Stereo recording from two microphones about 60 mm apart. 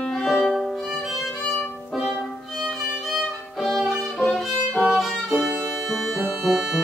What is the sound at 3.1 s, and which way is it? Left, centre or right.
Violin, centre.